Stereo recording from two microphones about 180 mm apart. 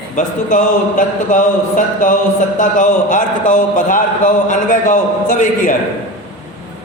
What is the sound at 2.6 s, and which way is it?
A man's voice, 45° left (ahead or behind).